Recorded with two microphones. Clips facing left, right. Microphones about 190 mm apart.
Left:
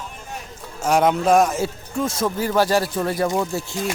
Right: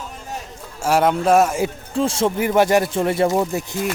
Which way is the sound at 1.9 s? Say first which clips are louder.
Right 4 dB; 30° right (ahead or behind).